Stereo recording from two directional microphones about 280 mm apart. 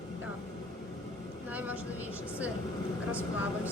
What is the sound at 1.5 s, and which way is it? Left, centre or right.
Speech, centre.